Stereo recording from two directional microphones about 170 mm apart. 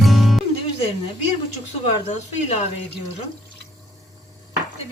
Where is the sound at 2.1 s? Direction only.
40° left (ahead or behind).